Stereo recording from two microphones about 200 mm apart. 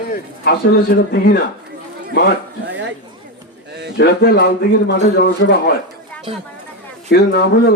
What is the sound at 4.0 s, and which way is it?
Speech, 50° left (ahead or behind).